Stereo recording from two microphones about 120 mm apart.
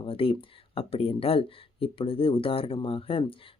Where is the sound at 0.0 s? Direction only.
50° left (ahead or behind).